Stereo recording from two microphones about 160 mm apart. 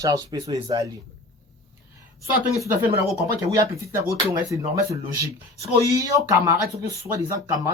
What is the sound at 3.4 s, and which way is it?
Speech, 20° right (ahead or behind).